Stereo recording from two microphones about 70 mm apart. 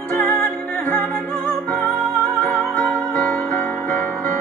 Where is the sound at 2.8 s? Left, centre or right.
Centre.